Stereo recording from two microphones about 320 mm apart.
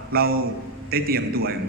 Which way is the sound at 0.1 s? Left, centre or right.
Right.